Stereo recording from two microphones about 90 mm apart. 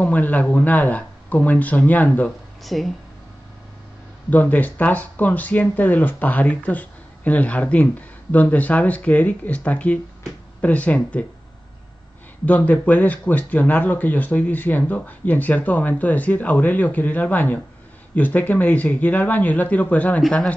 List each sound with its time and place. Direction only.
0.0 s speech: 15° left (ahead or behind)
2.6 s speech: centre (ahead or behind)
4.3 s speech: 20° left (ahead or behind)
12.4 s speech: 20° left (ahead or behind)